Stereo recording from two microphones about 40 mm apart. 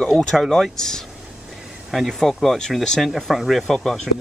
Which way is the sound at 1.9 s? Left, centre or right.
Centre.